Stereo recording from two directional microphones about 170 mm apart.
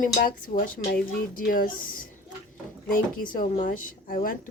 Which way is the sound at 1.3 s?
55° left (ahead or behind).